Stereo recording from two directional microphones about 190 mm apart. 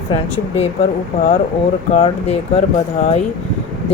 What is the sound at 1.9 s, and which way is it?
Speech, 30° left (ahead or behind).